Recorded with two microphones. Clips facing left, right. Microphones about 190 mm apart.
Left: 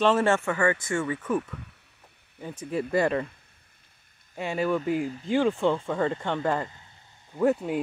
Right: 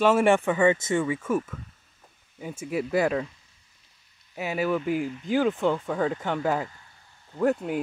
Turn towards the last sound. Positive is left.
turn(degrees=0)  # may be behind; listen again after turning